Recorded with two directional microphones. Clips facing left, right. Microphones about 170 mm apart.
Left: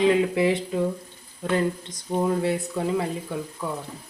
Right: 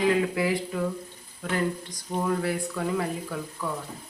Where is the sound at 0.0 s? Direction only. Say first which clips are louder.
Left 4 dB; 25° left (ahead or behind).